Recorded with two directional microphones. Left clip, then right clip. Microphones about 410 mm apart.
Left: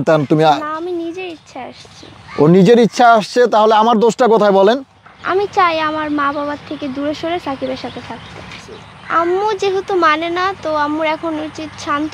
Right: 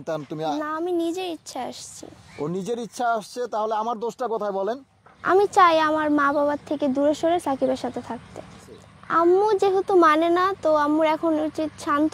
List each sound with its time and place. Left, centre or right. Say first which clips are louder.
0.0 s speech: left 17 dB; left
1.2 s a sound: left 3 dB; right
2.3 s speech: left 19 dB; left
5.2 s speech: left 3 dB; right